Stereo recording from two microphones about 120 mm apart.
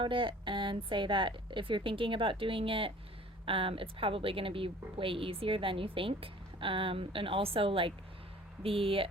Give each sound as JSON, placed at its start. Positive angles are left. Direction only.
{"t": 0.0, "sound": "a woman's voice", "side_deg": -45}